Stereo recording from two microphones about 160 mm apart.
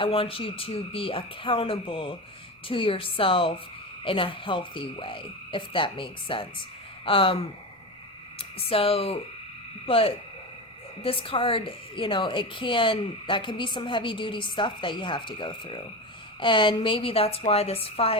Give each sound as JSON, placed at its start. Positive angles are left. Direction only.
{"t": 0.0, "sound": "a woman's voice", "side_deg": 35}
{"t": 8.4, "sound": "a woman's voice", "side_deg": 35}